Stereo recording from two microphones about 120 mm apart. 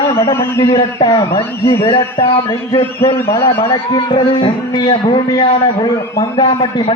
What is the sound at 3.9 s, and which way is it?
A man's voice, 45° left (ahead or behind).